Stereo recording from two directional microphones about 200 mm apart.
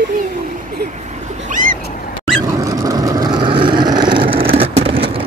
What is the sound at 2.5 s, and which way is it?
Vehicle, 15° right (ahead or behind).